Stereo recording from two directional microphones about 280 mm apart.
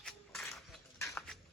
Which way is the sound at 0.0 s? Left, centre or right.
Centre.